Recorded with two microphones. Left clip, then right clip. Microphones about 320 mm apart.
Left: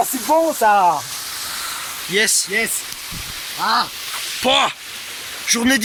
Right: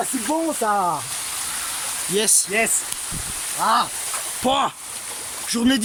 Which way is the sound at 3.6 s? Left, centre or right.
Centre.